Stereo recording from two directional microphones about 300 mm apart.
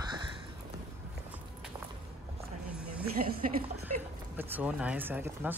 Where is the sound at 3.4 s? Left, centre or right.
Right.